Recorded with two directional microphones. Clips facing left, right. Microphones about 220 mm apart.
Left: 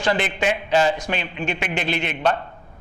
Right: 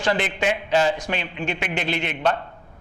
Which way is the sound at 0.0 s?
10° left (ahead or behind).